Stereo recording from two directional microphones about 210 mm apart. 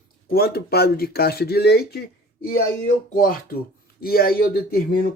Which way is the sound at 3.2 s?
45° left (ahead or behind).